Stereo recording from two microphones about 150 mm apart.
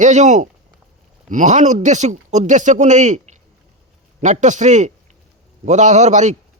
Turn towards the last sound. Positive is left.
turn(degrees=-50)  # may be behind; listen again after turning